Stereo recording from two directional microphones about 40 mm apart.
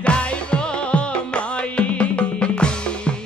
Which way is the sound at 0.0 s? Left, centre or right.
Left.